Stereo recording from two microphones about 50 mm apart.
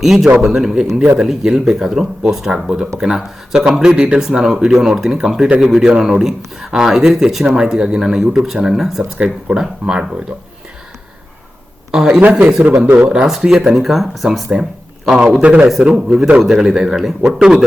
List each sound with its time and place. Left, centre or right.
0.0 s speech: centre
2.5 s speech: centre
9.1 s speech: centre
11.9 s a man's voice: centre
13.1 s a man's voice: centre; by 15.6 s right
15.8 s speech: centre